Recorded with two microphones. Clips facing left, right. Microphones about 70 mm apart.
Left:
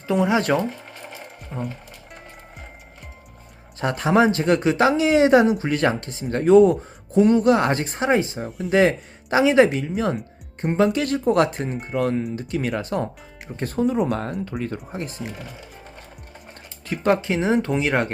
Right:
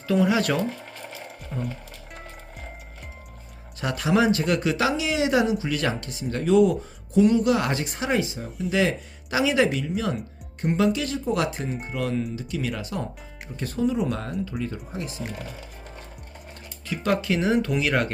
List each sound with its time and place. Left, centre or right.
0.1 s speech: left
3.8 s speech: left
8.4 s speech: centre
8.7 s speech: left
16.8 s speech: left
17.2 s speech: left